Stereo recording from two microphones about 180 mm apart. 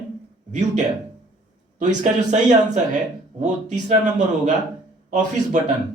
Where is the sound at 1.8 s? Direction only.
40° right (ahead or behind).